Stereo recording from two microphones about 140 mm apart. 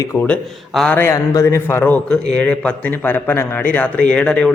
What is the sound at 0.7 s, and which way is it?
Speech, 5° left (ahead or behind).